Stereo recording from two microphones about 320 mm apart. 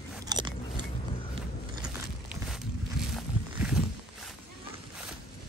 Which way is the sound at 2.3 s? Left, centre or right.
Centre.